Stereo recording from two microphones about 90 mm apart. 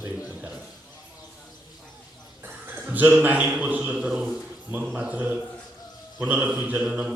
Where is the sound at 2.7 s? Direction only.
20° right (ahead or behind).